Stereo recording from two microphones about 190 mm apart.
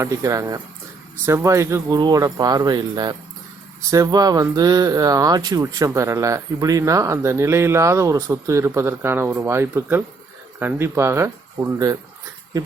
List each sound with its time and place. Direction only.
0.0 s speech: 15° right (ahead or behind)